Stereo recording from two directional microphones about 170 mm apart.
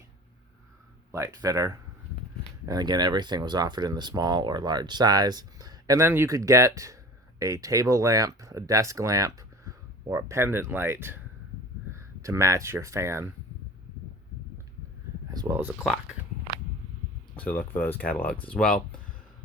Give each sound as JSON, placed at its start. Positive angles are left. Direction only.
{"t": 1.1, "sound": "speech", "side_deg": -20}
{"t": 15.3, "sound": "a sound", "side_deg": -20}
{"t": 15.8, "sound": "speech", "side_deg": 0}
{"t": 17.3, "sound": "speech", "side_deg": 10}